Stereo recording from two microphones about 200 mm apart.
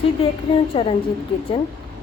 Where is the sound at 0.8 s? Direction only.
25° left (ahead or behind).